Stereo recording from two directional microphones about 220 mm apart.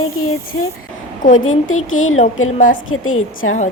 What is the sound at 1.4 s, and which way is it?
Speech, 65° left (ahead or behind).